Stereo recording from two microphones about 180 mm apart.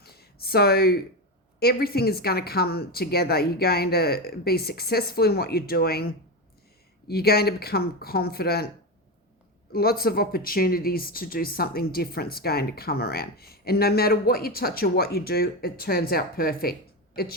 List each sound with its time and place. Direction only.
0.0 s a sound: 60° left (ahead or behind)
1.5 s speech: 60° left (ahead or behind)
9.7 s speech: 60° left (ahead or behind)